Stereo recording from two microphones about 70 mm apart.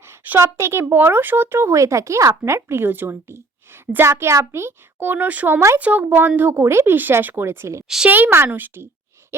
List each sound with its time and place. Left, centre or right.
0.3 s speech: right
5.5 s speech: right
5.8 s speech: right
7.9 s a woman's voice: centre
8.1 s speech: right